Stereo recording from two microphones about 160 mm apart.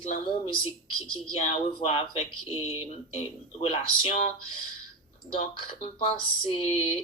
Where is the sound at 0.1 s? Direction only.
40° left (ahead or behind).